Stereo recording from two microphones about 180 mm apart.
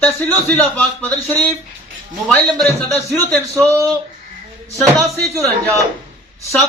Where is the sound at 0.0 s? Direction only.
10° left (ahead or behind).